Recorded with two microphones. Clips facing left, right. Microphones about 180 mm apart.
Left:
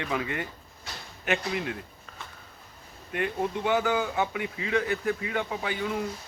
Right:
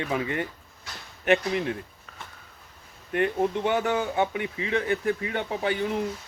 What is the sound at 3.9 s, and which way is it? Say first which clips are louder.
Speech: right 2 dB; 30° right (ahead or behind).